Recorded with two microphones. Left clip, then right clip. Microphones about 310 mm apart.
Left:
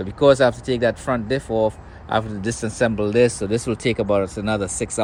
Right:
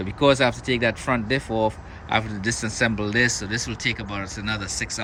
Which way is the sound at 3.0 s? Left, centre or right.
Centre.